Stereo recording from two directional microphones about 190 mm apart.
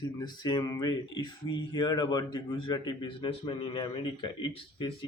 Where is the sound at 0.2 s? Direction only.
20° left (ahead or behind).